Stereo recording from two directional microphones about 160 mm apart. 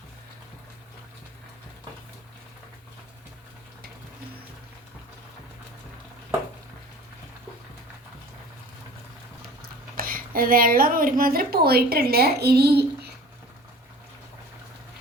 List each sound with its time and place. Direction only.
10.0 s a woman's voice: 60° right (ahead or behind); by 13.1 s 90° right